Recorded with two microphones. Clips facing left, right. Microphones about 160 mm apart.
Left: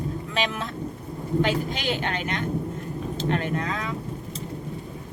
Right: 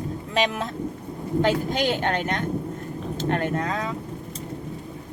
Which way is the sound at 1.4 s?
45° right (ahead or behind).